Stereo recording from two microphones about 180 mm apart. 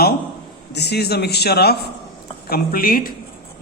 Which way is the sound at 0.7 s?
65° left (ahead or behind).